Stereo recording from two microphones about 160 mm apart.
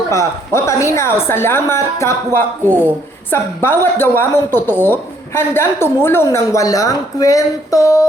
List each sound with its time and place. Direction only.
0.1 s a woman's voice: 20° left (ahead or behind)